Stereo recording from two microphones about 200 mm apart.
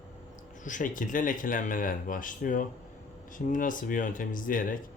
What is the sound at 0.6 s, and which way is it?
Speech, 40° left (ahead or behind).